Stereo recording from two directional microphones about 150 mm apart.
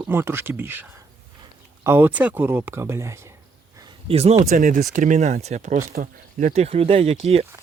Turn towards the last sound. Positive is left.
turn(degrees=-40)  # may be behind; listen again after turning